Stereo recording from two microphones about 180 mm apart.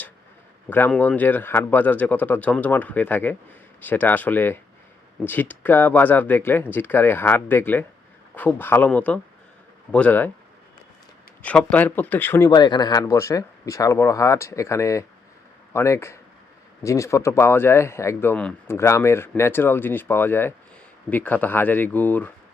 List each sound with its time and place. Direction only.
0.7 s speech: 10° left (ahead or behind)
11.4 s speech: 10° left (ahead or behind)
12.5 s speech: 25° left (ahead or behind)